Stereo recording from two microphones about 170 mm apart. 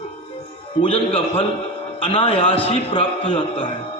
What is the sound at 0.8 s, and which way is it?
Music, 30° left (ahead or behind).